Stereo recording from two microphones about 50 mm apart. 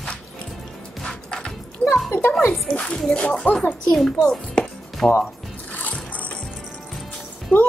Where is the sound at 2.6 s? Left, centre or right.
Centre.